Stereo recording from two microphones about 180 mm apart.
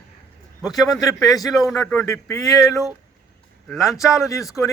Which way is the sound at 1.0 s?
20° left (ahead or behind).